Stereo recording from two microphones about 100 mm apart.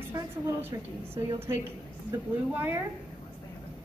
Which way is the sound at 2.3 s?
20° right (ahead or behind).